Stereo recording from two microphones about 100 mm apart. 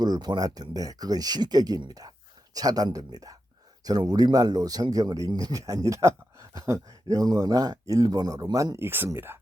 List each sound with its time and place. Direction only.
0.0 s speech: 45° right (ahead or behind); by 9.4 s 25° right (ahead or behind)